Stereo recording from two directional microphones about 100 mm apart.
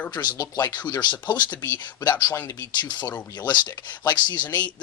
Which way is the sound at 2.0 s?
45° left (ahead or behind).